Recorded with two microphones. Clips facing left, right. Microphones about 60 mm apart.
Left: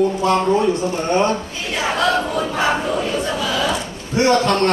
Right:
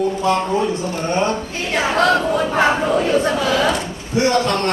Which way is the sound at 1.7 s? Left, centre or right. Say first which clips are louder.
Right 2 dB; right.